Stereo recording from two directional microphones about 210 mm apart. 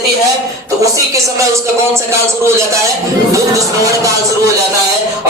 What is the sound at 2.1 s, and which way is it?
Speech, 15° right (ahead or behind).